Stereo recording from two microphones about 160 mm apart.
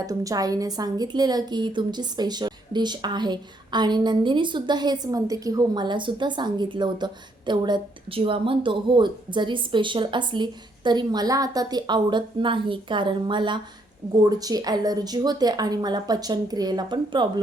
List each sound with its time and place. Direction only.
0.0 s a woman's voice: 20° right (ahead or behind)